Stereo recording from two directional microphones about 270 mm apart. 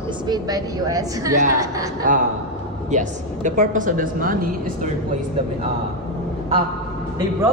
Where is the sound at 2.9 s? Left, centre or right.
Right.